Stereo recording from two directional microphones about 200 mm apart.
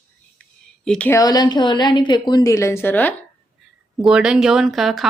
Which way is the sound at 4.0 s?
5° right (ahead or behind).